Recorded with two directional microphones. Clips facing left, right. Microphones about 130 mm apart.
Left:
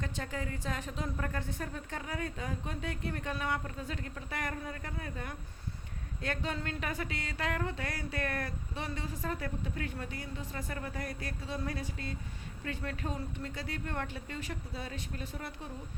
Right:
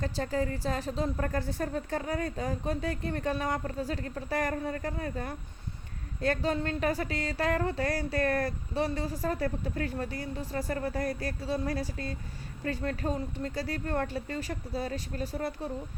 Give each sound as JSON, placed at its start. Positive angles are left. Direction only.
{"t": 0.0, "sound": "speech", "side_deg": -35}